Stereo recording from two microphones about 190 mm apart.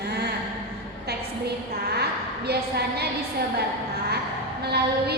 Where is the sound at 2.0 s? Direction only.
60° right (ahead or behind).